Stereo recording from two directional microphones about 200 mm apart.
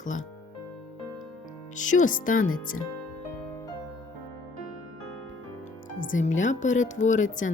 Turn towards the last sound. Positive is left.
turn(degrees=40)  # may be behind; listen again after turning